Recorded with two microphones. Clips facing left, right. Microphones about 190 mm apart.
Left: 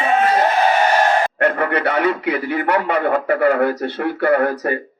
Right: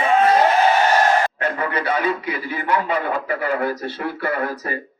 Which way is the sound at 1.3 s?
65° left (ahead or behind).